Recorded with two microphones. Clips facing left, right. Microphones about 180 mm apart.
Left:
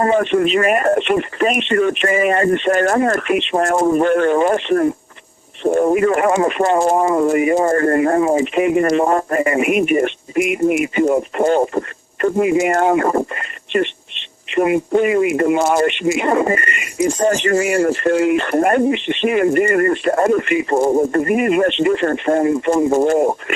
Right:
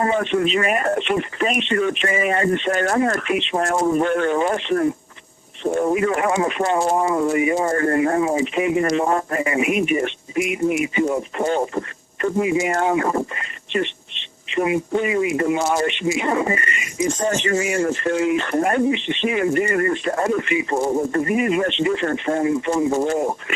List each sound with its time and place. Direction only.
0.0 s speech: 55° left (ahead or behind)